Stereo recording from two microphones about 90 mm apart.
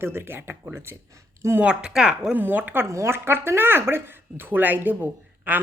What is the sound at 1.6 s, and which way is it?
Speech, 10° right (ahead or behind).